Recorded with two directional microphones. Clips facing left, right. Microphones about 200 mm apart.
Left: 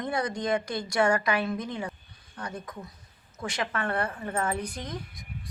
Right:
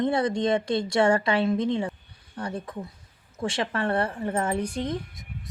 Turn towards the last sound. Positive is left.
turn(degrees=-25)  # may be behind; listen again after turning